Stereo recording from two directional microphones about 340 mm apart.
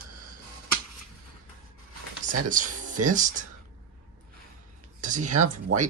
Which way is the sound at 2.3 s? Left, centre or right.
Right.